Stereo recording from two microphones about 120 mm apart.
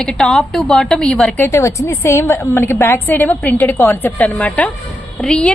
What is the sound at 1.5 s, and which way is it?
A woman's voice, 25° left (ahead or behind).